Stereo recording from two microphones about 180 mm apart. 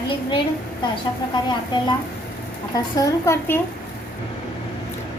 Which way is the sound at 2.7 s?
20° left (ahead or behind).